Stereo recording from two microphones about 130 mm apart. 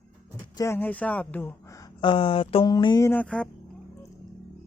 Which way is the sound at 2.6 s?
30° left (ahead or behind).